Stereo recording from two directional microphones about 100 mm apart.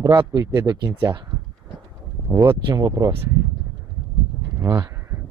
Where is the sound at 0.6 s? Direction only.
35° right (ahead or behind).